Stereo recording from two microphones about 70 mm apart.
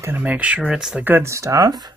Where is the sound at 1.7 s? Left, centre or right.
Right.